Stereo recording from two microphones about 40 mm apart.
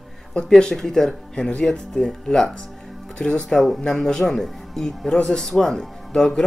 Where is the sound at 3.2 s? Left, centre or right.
Centre.